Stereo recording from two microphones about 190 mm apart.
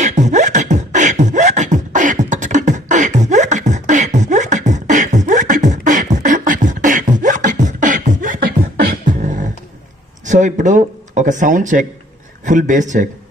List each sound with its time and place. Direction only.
0.0 s beatboxing: 40° right (ahead or behind)
10.2 s speech: 40° right (ahead or behind)